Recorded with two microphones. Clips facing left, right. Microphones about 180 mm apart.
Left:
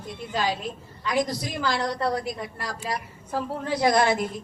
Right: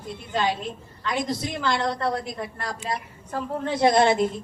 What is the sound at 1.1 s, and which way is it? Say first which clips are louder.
A woman's voice: left 1 dB; 25° right (ahead or behind).